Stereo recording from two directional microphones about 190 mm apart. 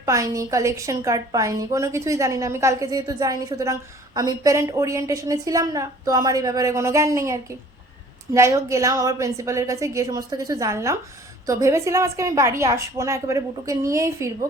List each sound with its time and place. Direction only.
0.0 s a woman's voice: 15° right (ahead or behind)